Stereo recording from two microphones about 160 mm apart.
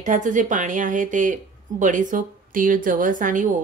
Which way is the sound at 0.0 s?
50° right (ahead or behind).